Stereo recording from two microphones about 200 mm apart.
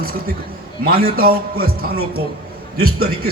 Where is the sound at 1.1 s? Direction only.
50° right (ahead or behind).